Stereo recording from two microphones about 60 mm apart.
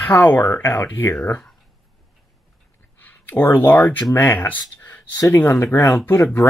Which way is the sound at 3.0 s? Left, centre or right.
Left.